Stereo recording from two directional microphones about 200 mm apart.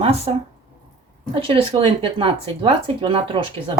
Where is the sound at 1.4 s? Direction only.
25° right (ahead or behind).